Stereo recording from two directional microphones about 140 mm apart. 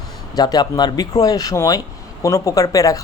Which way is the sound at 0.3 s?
30° left (ahead or behind).